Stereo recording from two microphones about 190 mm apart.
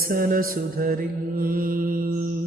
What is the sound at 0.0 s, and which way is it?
Mantra, 50° right (ahead or behind).